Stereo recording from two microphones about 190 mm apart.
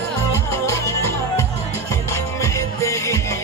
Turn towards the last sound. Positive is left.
turn(degrees=15)  # may be behind; listen again after turning